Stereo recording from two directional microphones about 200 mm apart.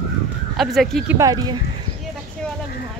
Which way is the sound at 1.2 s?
20° right (ahead or behind).